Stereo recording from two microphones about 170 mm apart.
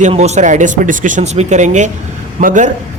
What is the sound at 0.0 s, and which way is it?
A man's voice, 40° right (ahead or behind).